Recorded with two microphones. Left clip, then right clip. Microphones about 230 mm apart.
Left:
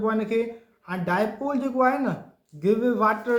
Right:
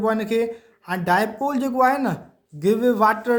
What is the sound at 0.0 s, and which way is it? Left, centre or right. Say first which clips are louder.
A man's voice: right 3 dB; right.